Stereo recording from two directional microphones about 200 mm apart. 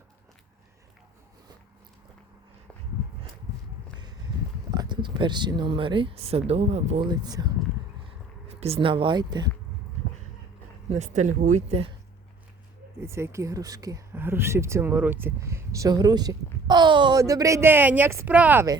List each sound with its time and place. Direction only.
4.7 s speech: 20° right (ahead or behind)
7.1 s speech: 20° right (ahead or behind)
10.8 s speech: 35° right (ahead or behind)
13.0 s speech: 15° right (ahead or behind)